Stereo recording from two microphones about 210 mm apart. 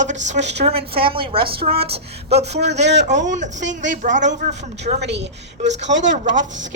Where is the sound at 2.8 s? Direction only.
55° right (ahead or behind).